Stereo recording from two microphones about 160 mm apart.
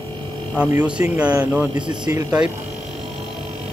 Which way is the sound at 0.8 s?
5° right (ahead or behind).